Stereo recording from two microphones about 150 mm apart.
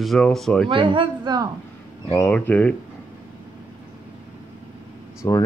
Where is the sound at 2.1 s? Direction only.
15° left (ahead or behind).